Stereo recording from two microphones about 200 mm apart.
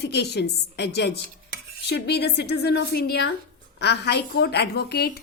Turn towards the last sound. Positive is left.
turn(degrees=55)  # may be behind; listen again after turning